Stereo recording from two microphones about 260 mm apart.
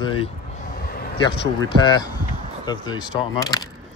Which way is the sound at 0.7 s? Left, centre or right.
Left.